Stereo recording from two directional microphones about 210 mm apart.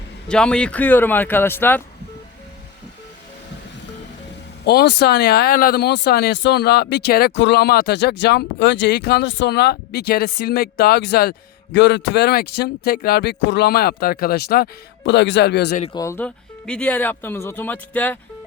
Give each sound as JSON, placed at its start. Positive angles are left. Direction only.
{"t": 0.3, "sound": "speech", "side_deg": 5}
{"t": 4.6, "sound": "speech", "side_deg": 50}
{"t": 15.8, "sound": "speech", "side_deg": 20}